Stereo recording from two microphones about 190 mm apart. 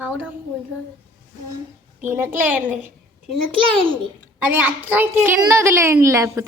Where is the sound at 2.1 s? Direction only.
10° right (ahead or behind).